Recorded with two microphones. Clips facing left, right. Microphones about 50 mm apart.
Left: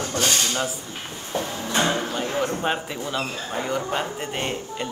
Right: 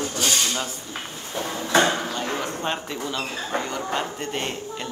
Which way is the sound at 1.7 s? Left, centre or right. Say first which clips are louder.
Right 4 dB; right.